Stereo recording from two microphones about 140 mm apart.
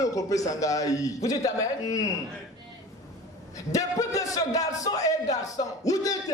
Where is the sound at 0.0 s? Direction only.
25° left (ahead or behind).